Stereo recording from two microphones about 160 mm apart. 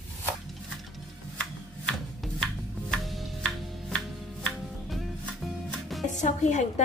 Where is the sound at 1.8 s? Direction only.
Centre (ahead or behind).